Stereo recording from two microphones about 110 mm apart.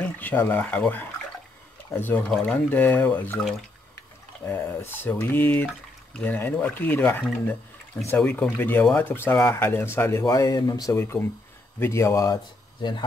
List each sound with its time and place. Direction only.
0.0 s speech: 15° left (ahead or behind)
4.5 s speech: 15° left (ahead or behind)
12.8 s speech: 45° left (ahead or behind)